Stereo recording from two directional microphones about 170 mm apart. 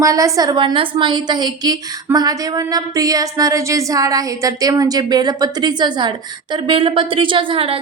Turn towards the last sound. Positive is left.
turn(degrees=-30)  # may be behind; listen again after turning